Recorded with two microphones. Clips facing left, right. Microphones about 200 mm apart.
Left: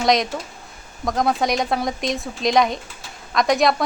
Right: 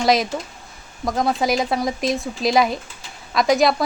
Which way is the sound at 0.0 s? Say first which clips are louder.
Right 1 dB; 5° right (ahead or behind).